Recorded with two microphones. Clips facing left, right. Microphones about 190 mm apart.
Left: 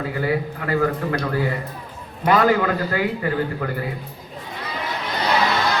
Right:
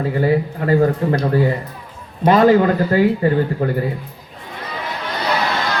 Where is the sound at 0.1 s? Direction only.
30° right (ahead or behind).